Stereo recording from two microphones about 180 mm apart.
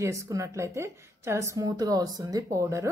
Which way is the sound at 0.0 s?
15° right (ahead or behind).